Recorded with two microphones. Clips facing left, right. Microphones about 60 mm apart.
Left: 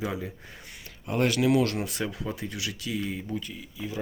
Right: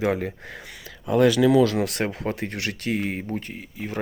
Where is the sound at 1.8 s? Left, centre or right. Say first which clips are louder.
Right 6 dB; right.